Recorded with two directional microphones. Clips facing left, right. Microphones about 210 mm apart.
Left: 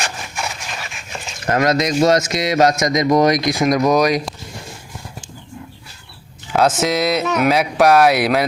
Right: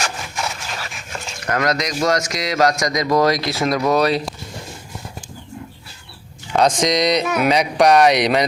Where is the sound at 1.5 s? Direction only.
25° left (ahead or behind).